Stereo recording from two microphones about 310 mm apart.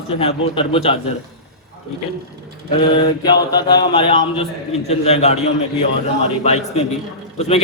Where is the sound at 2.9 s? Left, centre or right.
Centre.